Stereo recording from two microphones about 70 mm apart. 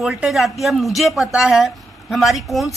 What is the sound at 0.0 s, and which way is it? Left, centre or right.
A man's voice, centre.